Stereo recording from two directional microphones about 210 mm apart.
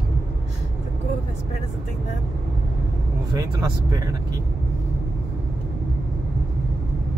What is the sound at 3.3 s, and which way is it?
Speech, 15° right (ahead or behind).